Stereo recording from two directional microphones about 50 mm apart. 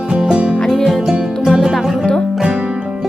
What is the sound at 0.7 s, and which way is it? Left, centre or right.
Music, centre.